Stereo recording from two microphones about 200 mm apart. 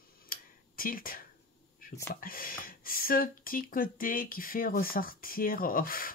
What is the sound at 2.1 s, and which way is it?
Speech, 45° left (ahead or behind).